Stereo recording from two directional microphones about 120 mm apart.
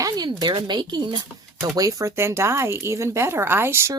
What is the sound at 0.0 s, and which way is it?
Speech, 35° right (ahead or behind).